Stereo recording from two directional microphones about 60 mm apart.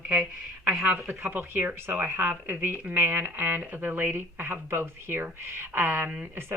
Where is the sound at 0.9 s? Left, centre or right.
Right.